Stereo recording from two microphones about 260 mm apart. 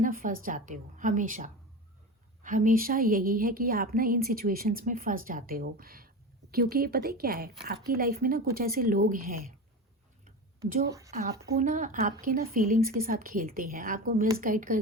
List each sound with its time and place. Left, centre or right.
0.0 s a woman's voice: right
10.2 s a sound: right
11.5 s a woman's voice: right